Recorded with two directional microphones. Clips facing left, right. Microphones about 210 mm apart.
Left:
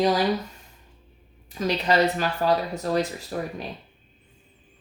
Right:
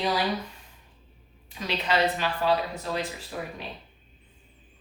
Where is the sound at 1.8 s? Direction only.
45° left (ahead or behind).